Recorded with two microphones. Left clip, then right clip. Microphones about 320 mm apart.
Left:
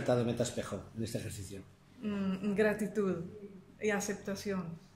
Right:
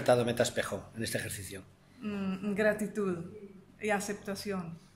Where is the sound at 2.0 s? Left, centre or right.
Centre.